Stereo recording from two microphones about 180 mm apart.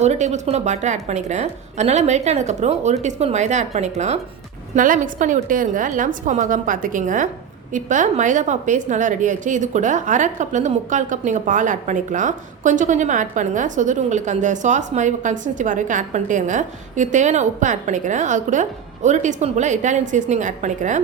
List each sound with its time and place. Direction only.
0.0 s a woman's voice: 40° right (ahead or behind)